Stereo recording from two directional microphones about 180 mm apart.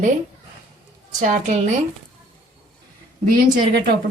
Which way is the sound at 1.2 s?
45° right (ahead or behind).